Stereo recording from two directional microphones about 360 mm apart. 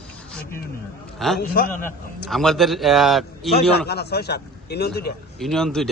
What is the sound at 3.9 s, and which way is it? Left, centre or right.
A man's voice, left.